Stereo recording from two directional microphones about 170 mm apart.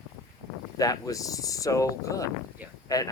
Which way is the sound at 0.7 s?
20° left (ahead or behind).